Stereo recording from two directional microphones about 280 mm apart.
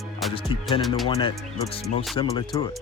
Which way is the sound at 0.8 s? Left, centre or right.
Centre.